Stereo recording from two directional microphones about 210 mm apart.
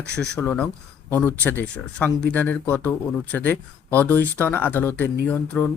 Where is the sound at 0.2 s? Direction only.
10° left (ahead or behind).